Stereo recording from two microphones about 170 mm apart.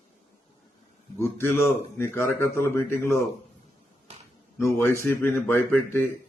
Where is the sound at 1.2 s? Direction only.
15° left (ahead or behind).